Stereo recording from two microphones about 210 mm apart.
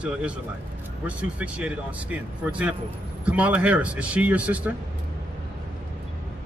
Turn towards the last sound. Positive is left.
turn(degrees=-5)  # may be behind; listen again after turning